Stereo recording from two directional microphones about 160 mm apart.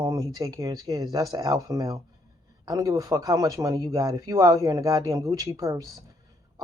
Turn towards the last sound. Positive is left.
turn(degrees=-20)  # may be behind; listen again after turning